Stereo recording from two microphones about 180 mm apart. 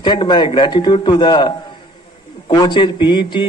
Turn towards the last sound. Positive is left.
turn(degrees=25)  # may be behind; listen again after turning